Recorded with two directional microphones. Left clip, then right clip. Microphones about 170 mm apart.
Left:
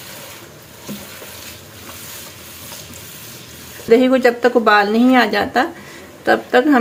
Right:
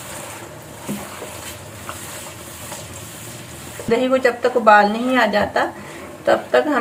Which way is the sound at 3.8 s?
75° left (ahead or behind).